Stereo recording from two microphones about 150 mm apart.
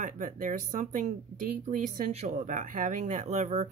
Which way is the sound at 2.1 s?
50° right (ahead or behind).